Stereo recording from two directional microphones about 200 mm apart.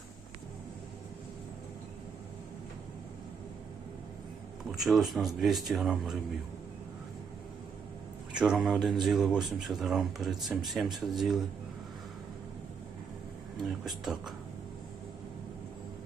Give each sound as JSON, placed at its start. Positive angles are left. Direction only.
{"t": 4.7, "sound": "speech", "side_deg": 0}
{"t": 8.3, "sound": "speech", "side_deg": -5}
{"t": 13.8, "sound": "speech", "side_deg": 0}